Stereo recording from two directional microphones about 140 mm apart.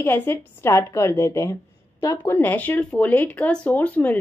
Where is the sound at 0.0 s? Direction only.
15° left (ahead or behind).